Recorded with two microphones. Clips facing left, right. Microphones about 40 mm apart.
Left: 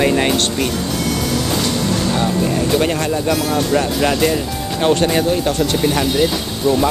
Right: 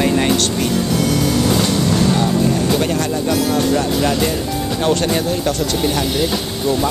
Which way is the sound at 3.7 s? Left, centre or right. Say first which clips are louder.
Even; left.